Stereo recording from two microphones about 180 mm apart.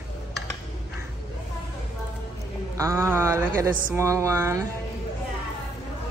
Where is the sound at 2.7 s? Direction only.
15° right (ahead or behind).